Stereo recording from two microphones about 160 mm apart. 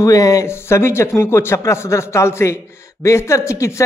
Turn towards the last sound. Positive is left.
turn(degrees=20)  # may be behind; listen again after turning